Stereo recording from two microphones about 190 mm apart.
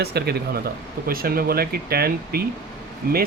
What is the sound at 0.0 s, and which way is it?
Speech, 55° right (ahead or behind).